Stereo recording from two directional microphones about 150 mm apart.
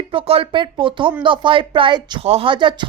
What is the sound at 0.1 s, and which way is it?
A woman's voice, 40° right (ahead or behind).